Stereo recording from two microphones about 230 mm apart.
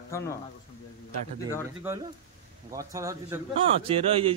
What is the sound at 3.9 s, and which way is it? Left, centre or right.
Speech, right.